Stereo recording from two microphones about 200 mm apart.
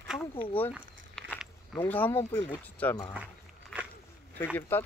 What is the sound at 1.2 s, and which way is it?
Walk, 5° left (ahead or behind).